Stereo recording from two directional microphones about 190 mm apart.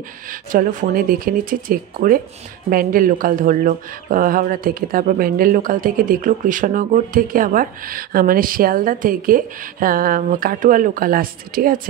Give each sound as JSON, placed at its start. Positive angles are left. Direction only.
{"t": 0.3, "sound": "speech", "side_deg": -45}